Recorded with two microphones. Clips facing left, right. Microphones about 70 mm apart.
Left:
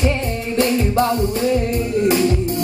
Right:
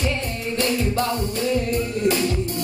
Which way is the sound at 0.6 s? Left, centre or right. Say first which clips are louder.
Left 6 dB; left.